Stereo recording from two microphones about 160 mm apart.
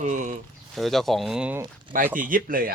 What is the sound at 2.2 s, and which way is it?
Speech, 60° right (ahead or behind).